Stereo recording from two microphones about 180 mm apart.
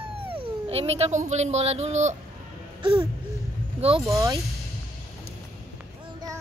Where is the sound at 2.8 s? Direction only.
30° right (ahead or behind).